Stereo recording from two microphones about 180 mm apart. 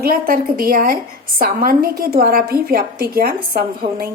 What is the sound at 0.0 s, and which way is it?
A woman's voice, 55° right (ahead or behind).